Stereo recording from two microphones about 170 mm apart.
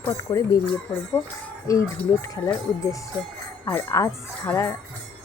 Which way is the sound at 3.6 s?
20° left (ahead or behind).